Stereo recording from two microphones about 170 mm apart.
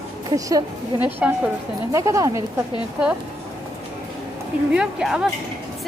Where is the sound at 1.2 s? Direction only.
10° right (ahead or behind).